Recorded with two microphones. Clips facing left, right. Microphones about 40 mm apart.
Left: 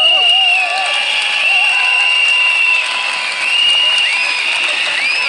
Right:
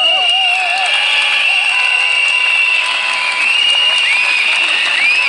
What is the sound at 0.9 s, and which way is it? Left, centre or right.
Applause, right.